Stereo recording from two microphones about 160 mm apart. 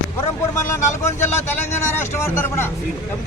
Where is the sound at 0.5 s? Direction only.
15° left (ahead or behind).